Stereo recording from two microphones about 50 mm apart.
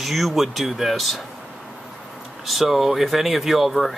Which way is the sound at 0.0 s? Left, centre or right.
Centre.